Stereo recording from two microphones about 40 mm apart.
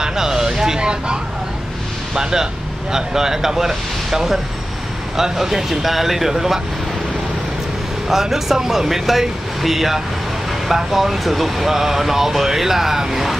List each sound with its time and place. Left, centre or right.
0.0 s a sound: centre
2.9 s speech: centre
8.1 s speech: centre